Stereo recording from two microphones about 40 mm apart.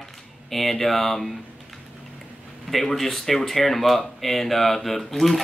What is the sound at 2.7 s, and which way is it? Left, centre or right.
Speech, centre.